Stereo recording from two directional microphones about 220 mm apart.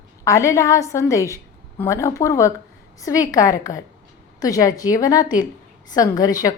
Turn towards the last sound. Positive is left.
turn(degrees=15)  # may be behind; listen again after turning